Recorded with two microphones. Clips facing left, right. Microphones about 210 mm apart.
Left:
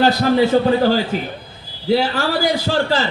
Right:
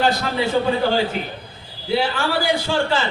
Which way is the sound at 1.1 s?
40° left (ahead or behind).